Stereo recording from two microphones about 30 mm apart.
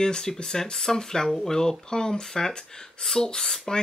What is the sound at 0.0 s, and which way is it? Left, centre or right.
Speech, left.